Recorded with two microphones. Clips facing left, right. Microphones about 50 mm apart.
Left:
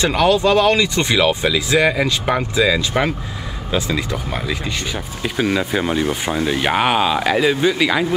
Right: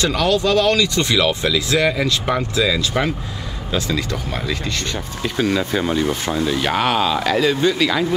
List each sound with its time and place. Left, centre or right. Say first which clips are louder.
0.0 s speech: left 3 dB; left